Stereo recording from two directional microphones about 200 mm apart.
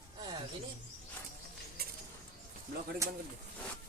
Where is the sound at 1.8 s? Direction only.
50° right (ahead or behind).